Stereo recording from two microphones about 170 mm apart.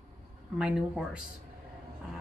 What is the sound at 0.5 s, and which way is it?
Speech, 5° right (ahead or behind).